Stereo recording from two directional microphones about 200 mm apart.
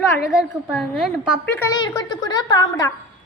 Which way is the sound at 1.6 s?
15° left (ahead or behind).